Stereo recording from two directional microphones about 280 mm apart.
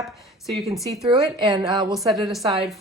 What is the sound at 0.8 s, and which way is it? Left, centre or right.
Speech, centre.